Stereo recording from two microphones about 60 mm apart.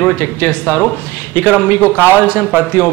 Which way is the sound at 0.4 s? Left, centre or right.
Left.